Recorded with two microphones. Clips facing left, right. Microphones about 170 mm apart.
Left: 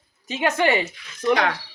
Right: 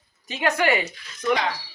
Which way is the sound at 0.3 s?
20° left (ahead or behind).